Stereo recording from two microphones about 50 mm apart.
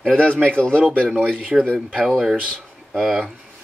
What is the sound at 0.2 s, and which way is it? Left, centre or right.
Speech, centre.